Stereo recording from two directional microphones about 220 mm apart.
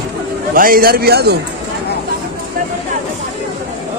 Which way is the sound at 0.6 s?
40° right (ahead or behind).